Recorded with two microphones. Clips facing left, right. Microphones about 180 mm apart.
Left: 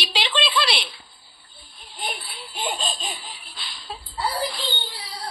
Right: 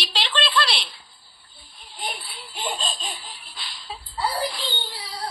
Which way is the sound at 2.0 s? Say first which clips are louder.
Left 1 dB; 55° left (ahead or behind).